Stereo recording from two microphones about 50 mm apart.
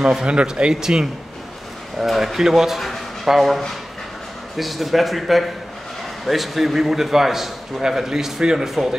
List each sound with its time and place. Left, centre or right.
0.0 s a man's voice: centre